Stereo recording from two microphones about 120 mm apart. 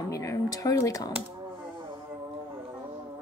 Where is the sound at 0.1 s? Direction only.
25° left (ahead or behind).